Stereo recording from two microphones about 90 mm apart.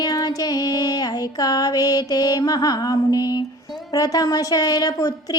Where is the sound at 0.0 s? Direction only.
45° left (ahead or behind).